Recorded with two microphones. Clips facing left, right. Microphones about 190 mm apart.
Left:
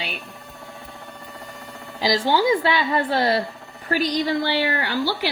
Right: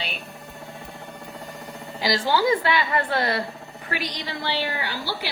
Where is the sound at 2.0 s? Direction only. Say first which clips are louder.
Left 2 dB; 20° left (ahead or behind).